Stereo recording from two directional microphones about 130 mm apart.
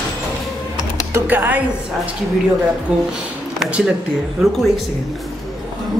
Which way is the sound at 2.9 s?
5° right (ahead or behind).